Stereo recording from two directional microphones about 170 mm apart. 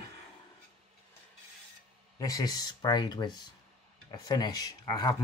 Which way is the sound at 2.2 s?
20° left (ahead or behind).